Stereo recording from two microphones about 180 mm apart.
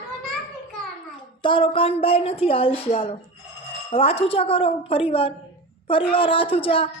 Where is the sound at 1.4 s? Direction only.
30° left (ahead or behind).